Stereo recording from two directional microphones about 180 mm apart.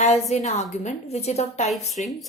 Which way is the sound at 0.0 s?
40° left (ahead or behind).